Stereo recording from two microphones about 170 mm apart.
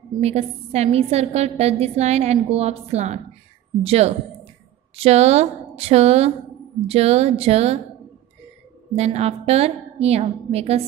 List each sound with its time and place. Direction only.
0.2 s a woman's voice: 40° right (ahead or behind)
8.9 s a woman's voice: 40° right (ahead or behind)